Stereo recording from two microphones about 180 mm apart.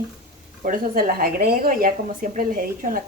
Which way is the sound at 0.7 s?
50° right (ahead or behind).